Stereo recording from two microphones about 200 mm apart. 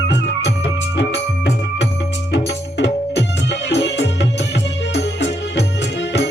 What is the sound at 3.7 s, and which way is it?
Music, 60° left (ahead or behind).